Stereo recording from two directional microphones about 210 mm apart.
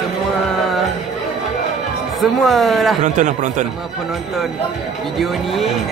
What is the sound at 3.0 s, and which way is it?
Speech, 35° right (ahead or behind).